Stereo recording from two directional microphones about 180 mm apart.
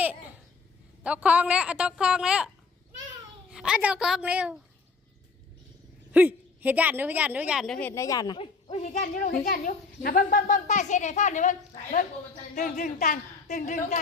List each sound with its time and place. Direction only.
0.0 s babbling: 10° right (ahead or behind)
1.0 s a woman's voice: 5° right (ahead or behind)
3.5 s a woman's voice: 5° right (ahead or behind)
6.1 s a woman's voice: 10° right (ahead or behind); by 8.4 s 20° left (ahead or behind)
8.6 s speech: 35° left (ahead or behind)
8.9 s a child's voice: 50° left (ahead or behind)